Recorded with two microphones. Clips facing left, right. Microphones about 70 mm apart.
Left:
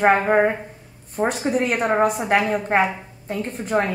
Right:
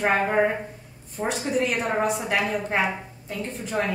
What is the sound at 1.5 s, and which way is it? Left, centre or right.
A woman's voice, left.